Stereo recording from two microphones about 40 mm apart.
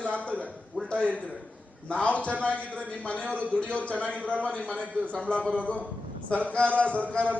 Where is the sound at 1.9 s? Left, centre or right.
Left.